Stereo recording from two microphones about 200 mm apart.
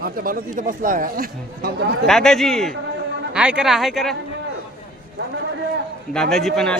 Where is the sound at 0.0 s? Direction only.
45° right (ahead or behind).